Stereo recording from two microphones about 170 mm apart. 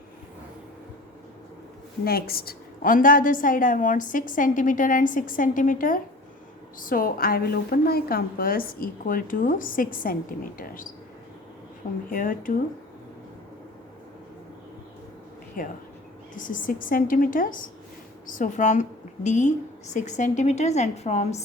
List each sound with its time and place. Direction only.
2.0 s a woman's voice: 65° left (ahead or behind)
12.1 s a woman's voice: 55° left (ahead or behind)
15.6 s a woman's voice: 55° left (ahead or behind)